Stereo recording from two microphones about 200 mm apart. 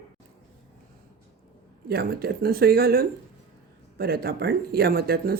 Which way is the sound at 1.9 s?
50° right (ahead or behind).